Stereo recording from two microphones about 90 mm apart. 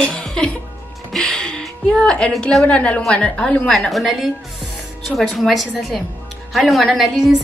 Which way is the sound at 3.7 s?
Centre (ahead or behind).